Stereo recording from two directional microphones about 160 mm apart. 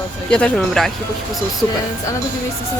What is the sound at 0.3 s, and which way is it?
Speech, 5° left (ahead or behind).